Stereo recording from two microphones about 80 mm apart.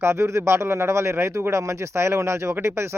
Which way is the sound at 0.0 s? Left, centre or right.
Right.